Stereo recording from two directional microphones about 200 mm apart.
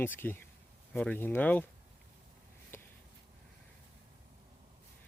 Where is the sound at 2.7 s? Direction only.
10° left (ahead or behind).